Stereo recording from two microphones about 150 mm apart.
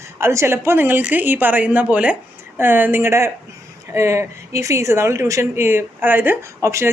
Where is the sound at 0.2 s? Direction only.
15° right (ahead or behind).